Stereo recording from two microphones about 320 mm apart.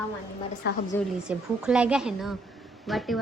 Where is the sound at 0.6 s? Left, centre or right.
Left.